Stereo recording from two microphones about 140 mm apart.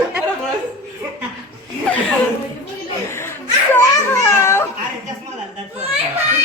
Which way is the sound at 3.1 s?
15° left (ahead or behind).